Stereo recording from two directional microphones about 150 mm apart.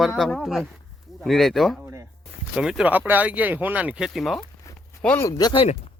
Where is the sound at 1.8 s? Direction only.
15° right (ahead or behind).